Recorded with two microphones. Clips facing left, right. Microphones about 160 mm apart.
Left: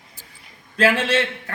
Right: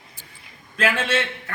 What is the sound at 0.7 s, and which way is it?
Speech, 35° left (ahead or behind).